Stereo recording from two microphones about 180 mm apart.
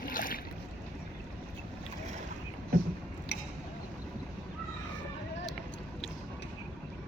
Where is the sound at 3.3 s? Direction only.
75° left (ahead or behind).